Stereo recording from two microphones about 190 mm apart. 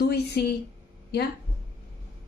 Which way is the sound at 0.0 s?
60° left (ahead or behind).